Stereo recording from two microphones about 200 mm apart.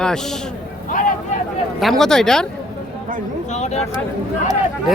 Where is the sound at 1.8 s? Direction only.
Centre (ahead or behind).